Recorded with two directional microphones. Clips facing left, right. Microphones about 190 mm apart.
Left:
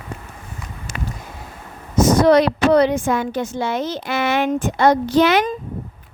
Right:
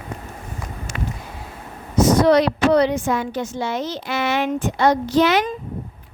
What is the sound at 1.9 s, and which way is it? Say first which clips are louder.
A woman's voice: left 1 dB; 45° left (ahead or behind).